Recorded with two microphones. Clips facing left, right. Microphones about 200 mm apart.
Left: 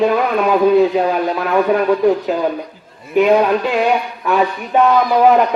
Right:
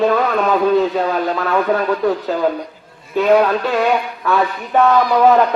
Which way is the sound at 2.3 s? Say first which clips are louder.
Even; 15° left (ahead or behind).